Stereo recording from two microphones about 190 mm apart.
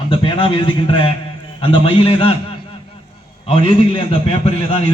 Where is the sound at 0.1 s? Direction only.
25° left (ahead or behind).